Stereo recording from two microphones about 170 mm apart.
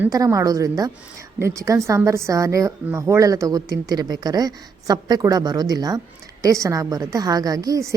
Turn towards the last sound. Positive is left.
turn(degrees=-20)  # may be behind; listen again after turning